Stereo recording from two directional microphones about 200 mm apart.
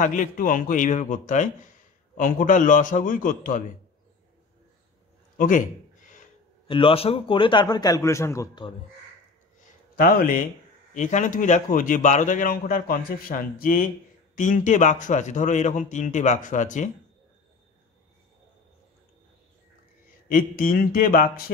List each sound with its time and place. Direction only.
0.0 s a man's voice: 40° left (ahead or behind)
6.7 s a man's voice: 25° left (ahead or behind)
9.9 s a man's voice: 45° left (ahead or behind)
20.2 s a man's voice: 45° left (ahead or behind)